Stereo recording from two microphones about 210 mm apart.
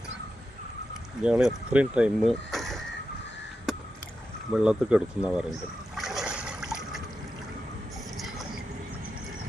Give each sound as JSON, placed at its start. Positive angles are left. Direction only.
{"t": 1.2, "sound": "speech", "side_deg": -5}
{"t": 4.5, "sound": "speech", "side_deg": -5}
{"t": 6.0, "sound": "a sound", "side_deg": 0}
{"t": 8.2, "sound": "vehicle", "side_deg": 0}